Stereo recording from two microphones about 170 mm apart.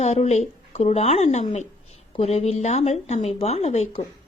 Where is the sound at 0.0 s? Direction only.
40° left (ahead or behind).